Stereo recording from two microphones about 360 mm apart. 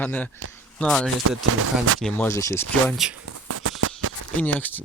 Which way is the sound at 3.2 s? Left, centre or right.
Right.